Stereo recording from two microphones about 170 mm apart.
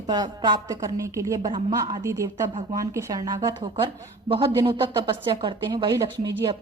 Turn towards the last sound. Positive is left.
turn(degrees=-20)  # may be behind; listen again after turning